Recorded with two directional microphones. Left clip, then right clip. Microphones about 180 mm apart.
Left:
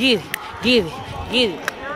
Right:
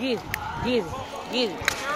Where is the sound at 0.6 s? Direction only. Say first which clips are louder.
Left 10 dB; 60° left (ahead or behind).